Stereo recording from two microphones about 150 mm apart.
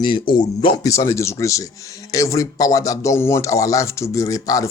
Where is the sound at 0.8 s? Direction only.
20° left (ahead or behind).